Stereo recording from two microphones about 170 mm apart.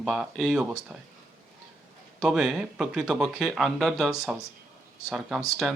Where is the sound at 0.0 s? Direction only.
Centre (ahead or behind).